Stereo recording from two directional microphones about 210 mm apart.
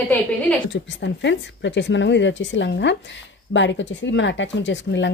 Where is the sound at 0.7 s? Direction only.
60° left (ahead or behind).